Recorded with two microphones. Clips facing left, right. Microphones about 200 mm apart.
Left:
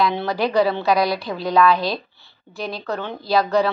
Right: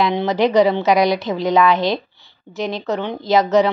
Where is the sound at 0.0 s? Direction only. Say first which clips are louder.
Right 4 dB; 20° right (ahead or behind).